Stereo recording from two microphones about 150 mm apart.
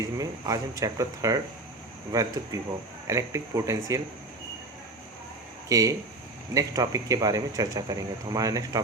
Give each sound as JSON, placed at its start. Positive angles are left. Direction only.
{"t": 0.0, "sound": "speech", "side_deg": -25}
{"t": 2.5, "sound": "speech", "side_deg": -25}
{"t": 5.6, "sound": "speech", "side_deg": -20}